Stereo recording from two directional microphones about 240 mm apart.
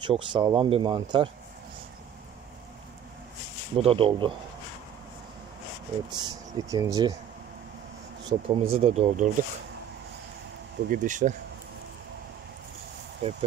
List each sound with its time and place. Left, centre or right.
0.0 s speech: centre
3.7 s speech: right
6.1 s speech: centre
8.3 s speech: right
10.9 s speech: right
13.2 s speech: right